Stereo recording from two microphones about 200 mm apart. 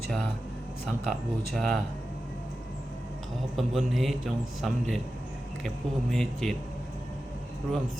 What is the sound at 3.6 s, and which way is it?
A man's voice, centre (ahead or behind).